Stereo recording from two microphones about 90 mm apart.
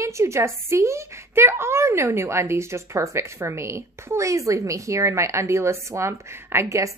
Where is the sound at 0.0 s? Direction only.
35° right (ahead or behind).